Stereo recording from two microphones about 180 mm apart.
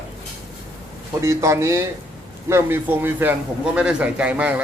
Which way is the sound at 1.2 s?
15° right (ahead or behind).